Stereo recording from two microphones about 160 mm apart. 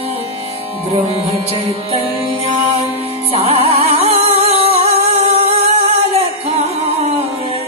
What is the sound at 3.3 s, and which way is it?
Music, 35° right (ahead or behind).